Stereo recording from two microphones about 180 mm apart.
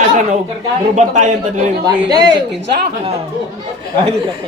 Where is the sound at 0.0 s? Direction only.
40° right (ahead or behind).